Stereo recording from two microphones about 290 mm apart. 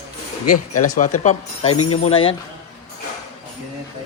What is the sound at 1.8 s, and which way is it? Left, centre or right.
Speech, left.